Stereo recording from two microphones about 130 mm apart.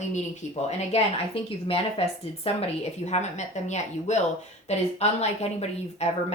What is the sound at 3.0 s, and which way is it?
Speech, 60° left (ahead or behind).